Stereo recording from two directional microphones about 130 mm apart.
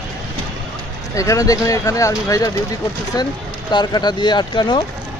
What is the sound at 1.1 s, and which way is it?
Speech, 25° left (ahead or behind).